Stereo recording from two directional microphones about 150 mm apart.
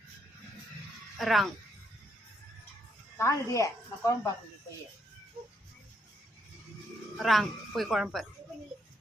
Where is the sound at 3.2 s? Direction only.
20° left (ahead or behind).